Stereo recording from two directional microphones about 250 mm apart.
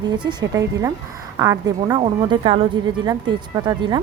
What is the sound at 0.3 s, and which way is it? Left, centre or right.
A woman's voice, centre.